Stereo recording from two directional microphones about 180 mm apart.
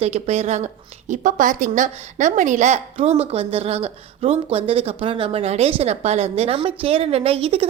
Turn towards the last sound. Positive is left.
turn(degrees=-30)  # may be behind; listen again after turning